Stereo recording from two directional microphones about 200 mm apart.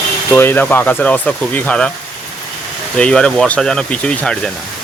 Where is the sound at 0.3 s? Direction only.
10° left (ahead or behind).